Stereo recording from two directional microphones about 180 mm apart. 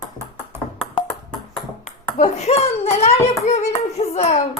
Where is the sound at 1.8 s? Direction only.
40° left (ahead or behind).